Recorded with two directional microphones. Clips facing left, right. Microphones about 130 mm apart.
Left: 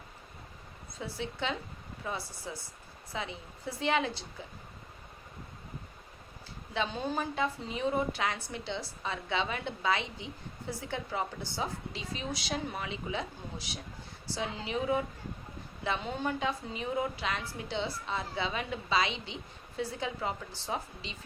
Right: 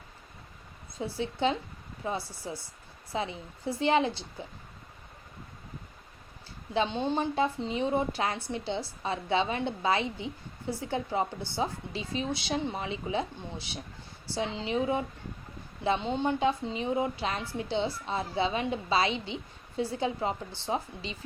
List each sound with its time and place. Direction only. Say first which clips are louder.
0.9 s a woman's voice: right 5 dB; 30° right (ahead or behind)
6.7 s a woman's voice: right 5 dB; 25° right (ahead or behind)